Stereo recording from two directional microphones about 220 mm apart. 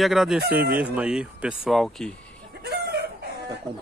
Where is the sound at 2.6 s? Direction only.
45° right (ahead or behind).